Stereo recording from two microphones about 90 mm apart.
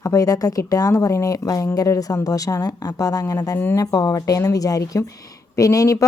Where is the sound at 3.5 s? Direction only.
30° left (ahead or behind).